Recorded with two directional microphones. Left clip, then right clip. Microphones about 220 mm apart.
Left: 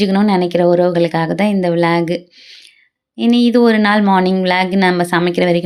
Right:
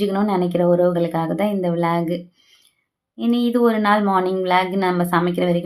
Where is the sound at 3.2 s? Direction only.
25° left (ahead or behind).